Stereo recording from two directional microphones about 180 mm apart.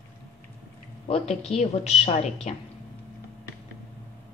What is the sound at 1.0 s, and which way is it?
A woman's voice, 35° left (ahead or behind).